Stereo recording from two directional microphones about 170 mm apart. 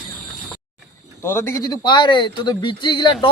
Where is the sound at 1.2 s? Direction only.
15° left (ahead or behind).